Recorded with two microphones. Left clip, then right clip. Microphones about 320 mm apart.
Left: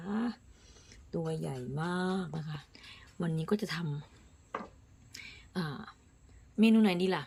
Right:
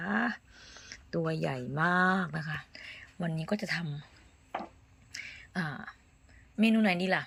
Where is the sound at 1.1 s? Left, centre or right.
Right.